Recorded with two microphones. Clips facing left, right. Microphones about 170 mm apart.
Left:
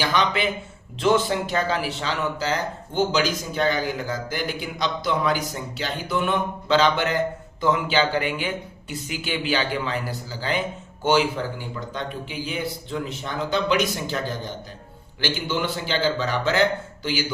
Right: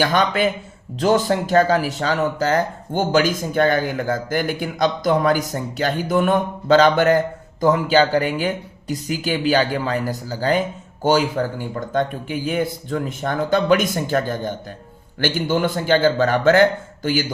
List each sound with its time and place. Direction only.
0.0 s speech: 45° right (ahead or behind)